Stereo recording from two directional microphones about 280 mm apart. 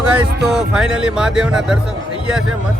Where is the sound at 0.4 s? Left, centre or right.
Centre.